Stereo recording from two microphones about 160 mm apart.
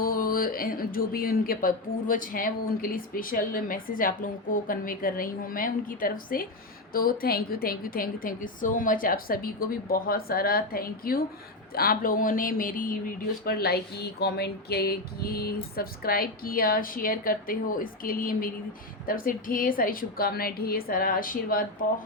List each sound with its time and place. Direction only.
0.0 s speech: 65° left (ahead or behind)